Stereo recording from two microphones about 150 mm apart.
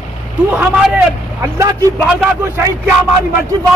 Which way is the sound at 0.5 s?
10° right (ahead or behind).